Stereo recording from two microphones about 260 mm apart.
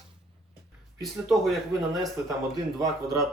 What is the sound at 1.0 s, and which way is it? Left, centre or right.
Speech, centre.